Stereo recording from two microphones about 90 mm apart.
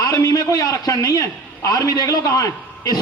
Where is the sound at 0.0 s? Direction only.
35° left (ahead or behind).